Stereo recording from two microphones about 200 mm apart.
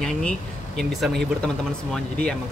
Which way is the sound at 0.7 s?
Centre (ahead or behind).